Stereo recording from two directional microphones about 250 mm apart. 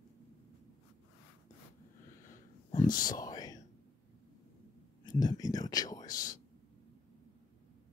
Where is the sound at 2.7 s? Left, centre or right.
Centre.